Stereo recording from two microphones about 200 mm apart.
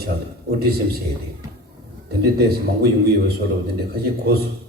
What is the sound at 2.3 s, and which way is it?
A man's voice, 50° right (ahead or behind).